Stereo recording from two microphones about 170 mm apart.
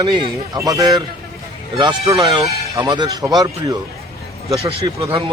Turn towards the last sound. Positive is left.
turn(degrees=-30)  # may be behind; listen again after turning